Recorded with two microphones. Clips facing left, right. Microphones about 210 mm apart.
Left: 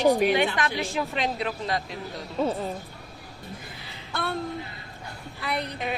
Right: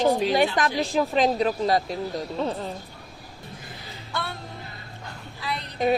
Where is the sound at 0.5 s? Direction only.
40° right (ahead or behind).